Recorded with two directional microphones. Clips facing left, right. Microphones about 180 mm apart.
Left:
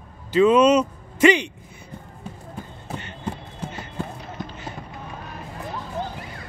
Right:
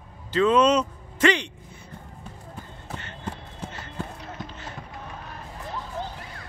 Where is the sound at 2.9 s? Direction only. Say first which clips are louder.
Left 4 dB; 15° left (ahead or behind).